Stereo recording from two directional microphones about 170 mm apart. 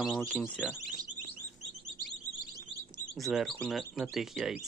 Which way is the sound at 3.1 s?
Centre (ahead or behind).